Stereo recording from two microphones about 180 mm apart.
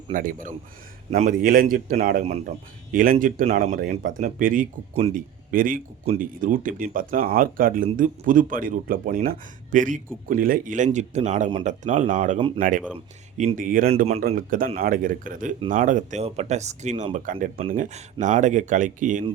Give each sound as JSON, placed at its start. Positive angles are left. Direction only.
{"t": 0.1, "sound": "speech", "side_deg": -50}